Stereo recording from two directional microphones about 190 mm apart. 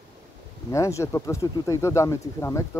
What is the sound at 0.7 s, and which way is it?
Speech, 15° left (ahead or behind).